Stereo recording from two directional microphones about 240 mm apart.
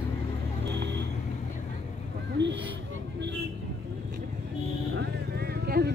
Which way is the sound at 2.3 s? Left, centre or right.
Right.